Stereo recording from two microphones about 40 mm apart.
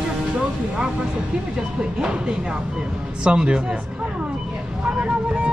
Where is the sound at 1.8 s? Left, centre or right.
Right.